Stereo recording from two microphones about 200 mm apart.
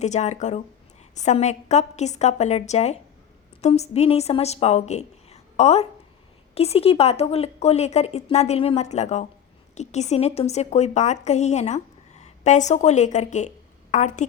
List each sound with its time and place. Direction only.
0.0 s a woman's voice: 35° left (ahead or behind)